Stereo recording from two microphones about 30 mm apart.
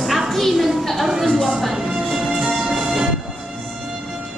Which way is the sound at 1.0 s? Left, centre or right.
Centre.